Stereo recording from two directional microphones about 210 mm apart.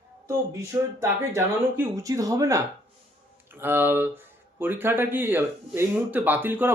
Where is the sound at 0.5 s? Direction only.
15° right (ahead or behind).